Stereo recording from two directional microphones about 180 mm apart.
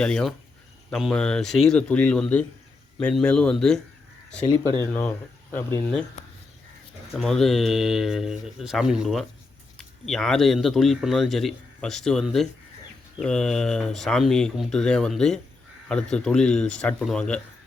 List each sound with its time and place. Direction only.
0.0 s speech: 5° left (ahead or behind)
4.4 s speech: 15° left (ahead or behind)
7.2 s speech: centre (ahead or behind)